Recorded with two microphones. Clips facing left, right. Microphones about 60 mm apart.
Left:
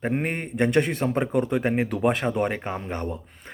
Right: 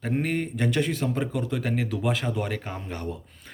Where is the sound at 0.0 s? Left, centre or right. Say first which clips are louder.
Even; left.